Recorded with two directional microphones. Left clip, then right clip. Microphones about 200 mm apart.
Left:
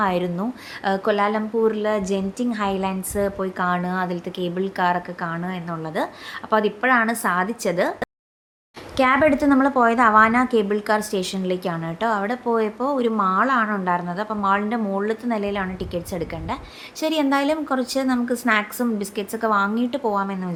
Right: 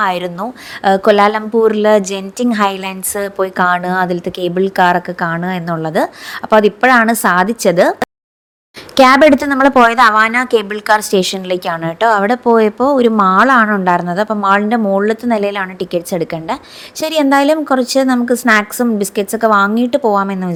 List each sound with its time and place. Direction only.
0.0 s a woman's voice: 40° right (ahead or behind)